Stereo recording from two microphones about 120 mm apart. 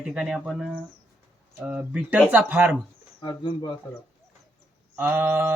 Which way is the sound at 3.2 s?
40° left (ahead or behind).